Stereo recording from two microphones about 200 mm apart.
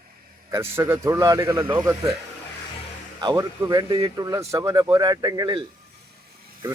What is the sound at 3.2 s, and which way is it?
Speech, 20° right (ahead or behind).